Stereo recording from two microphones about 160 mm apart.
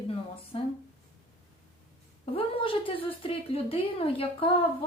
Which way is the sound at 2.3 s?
35° left (ahead or behind).